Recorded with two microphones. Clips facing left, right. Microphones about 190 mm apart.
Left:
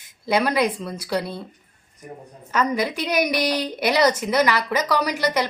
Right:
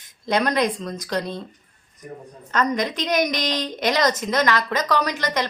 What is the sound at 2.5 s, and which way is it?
A woman's voice, 10° left (ahead or behind).